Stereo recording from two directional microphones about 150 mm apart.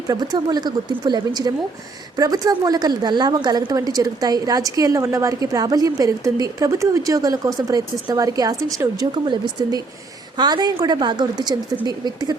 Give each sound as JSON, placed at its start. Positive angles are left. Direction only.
{"t": 0.1, "sound": "a woman's voice", "side_deg": -25}